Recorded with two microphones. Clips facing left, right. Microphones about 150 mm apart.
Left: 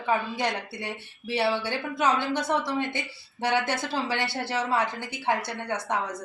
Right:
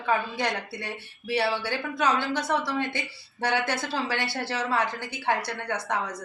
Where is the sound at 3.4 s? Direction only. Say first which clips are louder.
Left 1 dB; 20° left (ahead or behind).